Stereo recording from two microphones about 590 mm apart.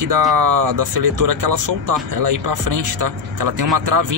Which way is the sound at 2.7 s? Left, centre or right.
Right.